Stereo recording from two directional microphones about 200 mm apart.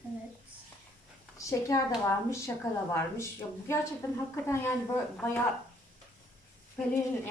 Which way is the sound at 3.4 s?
15° left (ahead or behind).